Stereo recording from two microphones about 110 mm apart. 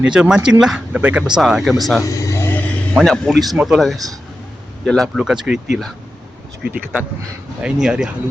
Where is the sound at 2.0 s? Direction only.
30° left (ahead or behind).